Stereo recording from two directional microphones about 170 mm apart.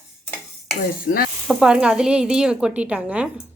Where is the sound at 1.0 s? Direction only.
60° left (ahead or behind).